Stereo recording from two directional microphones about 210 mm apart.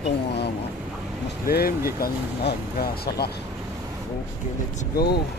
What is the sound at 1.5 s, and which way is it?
Speech, 45° left (ahead or behind).